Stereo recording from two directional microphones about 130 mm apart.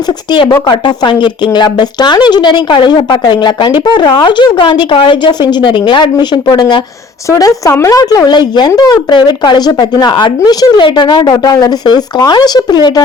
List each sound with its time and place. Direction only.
0.7 s speech: 35° left (ahead or behind)